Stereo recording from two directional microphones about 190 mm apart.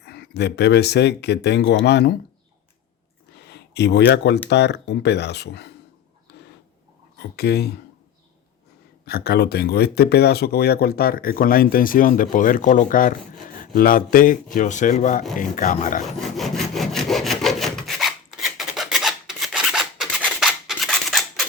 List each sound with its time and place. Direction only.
0.0 s speech: 60° left (ahead or behind)
3.4 s a sound: 65° left (ahead or behind)
4.4 s speech: 60° left (ahead or behind)
7.2 s speech: 60° left (ahead or behind)
9.0 s speech: 55° left (ahead or behind)
16.4 s sawing: centre (ahead or behind)